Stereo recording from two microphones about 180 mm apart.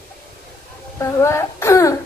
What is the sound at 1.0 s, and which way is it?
Speech, 15° left (ahead or behind).